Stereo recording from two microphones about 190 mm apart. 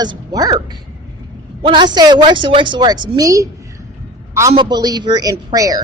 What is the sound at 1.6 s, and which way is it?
Speech, 25° right (ahead or behind).